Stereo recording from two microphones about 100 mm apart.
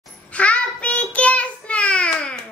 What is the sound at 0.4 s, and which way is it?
Child singing, 15° left (ahead or behind).